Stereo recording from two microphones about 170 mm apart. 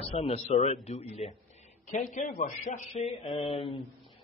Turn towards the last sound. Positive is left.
turn(degrees=30)  # may be behind; listen again after turning